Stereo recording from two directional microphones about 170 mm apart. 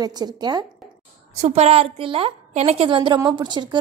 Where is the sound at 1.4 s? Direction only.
40° right (ahead or behind).